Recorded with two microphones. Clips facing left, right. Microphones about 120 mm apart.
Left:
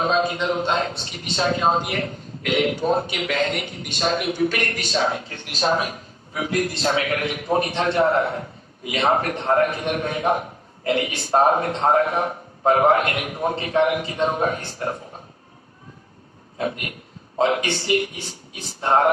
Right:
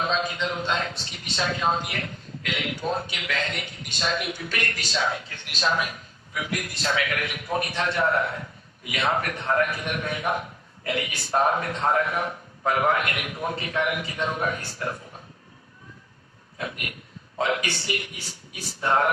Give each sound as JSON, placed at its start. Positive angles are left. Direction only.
{"t": 0.2, "sound": "a man's voice", "side_deg": 30}
{"t": 16.6, "sound": "a man's voice", "side_deg": 30}